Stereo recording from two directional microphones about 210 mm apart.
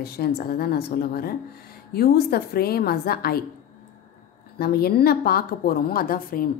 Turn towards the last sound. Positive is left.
turn(degrees=45)  # may be behind; listen again after turning